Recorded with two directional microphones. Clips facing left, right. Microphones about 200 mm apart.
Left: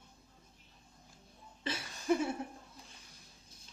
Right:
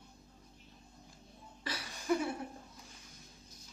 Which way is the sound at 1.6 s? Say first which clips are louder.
Left 3 dB; 25° left (ahead or behind).